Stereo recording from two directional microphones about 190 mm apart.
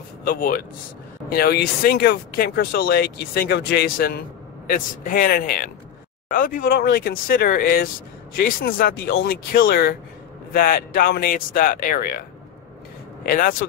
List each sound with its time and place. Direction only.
0.2 s a man's voice: 50° left (ahead or behind)